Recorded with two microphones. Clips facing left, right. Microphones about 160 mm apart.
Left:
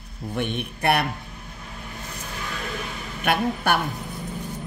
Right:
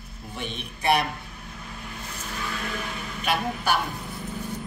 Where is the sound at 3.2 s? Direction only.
60° left (ahead or behind).